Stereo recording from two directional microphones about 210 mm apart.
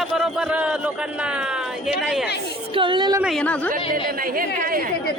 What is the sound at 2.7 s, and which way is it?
Speech, 25° right (ahead or behind).